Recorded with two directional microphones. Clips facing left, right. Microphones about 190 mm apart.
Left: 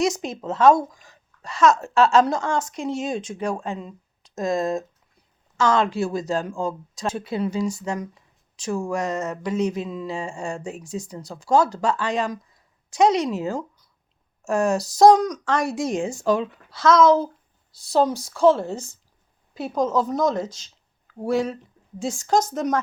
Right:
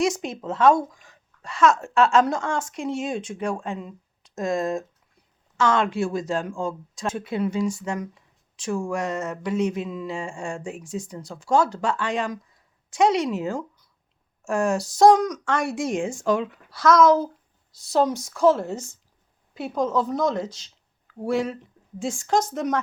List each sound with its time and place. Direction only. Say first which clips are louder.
0.0 s speech: left 1 dB; 40° left (ahead or behind)